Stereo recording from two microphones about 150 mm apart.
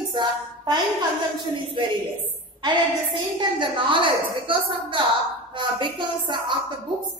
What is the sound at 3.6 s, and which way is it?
A woman's voice, 35° right (ahead or behind).